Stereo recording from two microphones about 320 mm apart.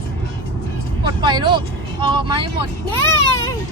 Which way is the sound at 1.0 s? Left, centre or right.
Centre.